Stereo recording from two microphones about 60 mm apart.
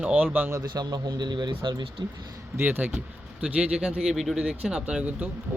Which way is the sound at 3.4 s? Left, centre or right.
Centre.